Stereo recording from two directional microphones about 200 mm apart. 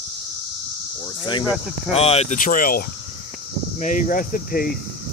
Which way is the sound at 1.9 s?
30° left (ahead or behind).